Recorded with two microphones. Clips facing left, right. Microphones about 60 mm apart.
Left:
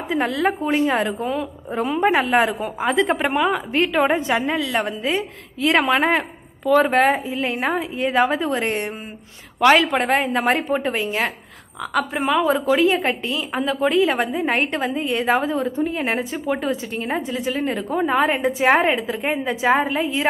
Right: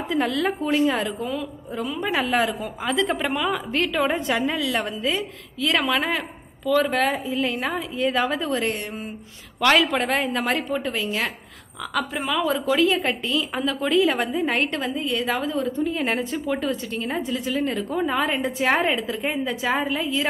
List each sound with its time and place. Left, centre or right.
0.1 s a woman's voice: left
15.9 s a woman's voice: centre